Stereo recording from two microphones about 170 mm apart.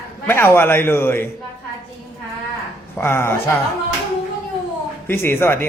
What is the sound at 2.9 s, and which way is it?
Speech, 15° left (ahead or behind).